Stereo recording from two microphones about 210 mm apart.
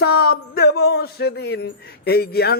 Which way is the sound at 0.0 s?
50° left (ahead or behind).